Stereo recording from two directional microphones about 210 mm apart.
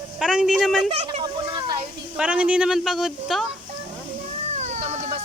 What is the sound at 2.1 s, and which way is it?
Speech, 5° right (ahead or behind).